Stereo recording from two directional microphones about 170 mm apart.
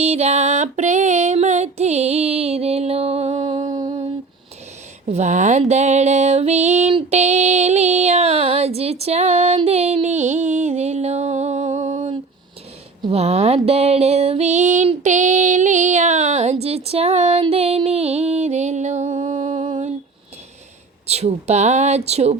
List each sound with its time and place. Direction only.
0.0 s music: 40° right (ahead or behind)
3.4 s music: 25° right (ahead or behind)
5.0 s music: 40° right (ahead or behind)
21.1 s music: 40° right (ahead or behind)